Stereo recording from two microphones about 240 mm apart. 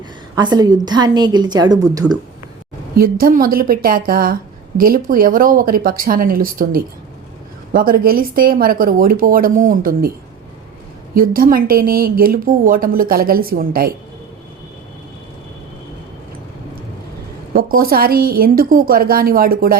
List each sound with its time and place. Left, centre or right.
0.3 s a woman's voice: centre
2.9 s a woman's voice: right
11.1 s a woman's voice: right
17.5 s a woman's voice: right